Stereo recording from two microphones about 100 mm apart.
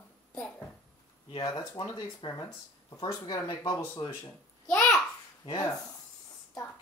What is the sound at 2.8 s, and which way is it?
Speech, 40° left (ahead or behind).